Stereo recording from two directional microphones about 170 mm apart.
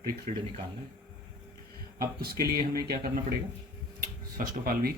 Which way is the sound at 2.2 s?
65° right (ahead or behind).